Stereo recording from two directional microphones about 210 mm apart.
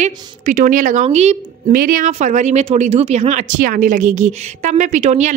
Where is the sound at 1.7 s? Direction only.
40° right (ahead or behind).